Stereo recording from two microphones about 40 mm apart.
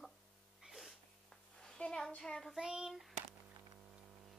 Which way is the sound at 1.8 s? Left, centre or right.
Left.